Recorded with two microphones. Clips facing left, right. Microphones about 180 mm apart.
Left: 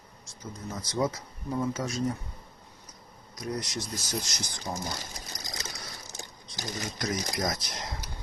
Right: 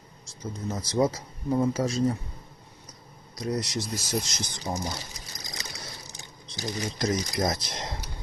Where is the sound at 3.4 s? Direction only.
25° right (ahead or behind).